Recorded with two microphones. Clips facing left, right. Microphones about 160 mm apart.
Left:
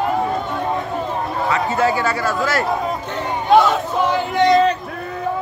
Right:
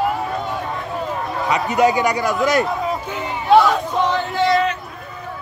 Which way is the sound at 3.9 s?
10° left (ahead or behind).